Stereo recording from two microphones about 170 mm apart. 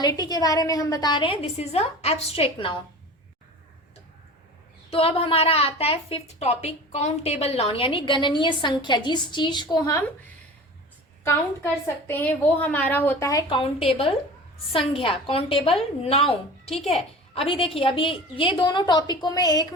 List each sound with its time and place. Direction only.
0.0 s a woman's voice: 25° left (ahead or behind)
4.9 s a woman's voice: 35° left (ahead or behind)
11.3 s a woman's voice: 15° left (ahead or behind)
13.5 s a woman's voice: 35° left (ahead or behind)